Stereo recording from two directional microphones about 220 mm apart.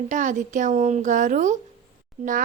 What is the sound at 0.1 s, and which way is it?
A woman's voice, 35° right (ahead or behind).